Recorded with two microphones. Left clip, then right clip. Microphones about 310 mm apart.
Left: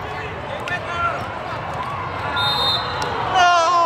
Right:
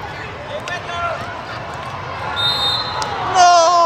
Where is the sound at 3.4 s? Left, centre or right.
Centre.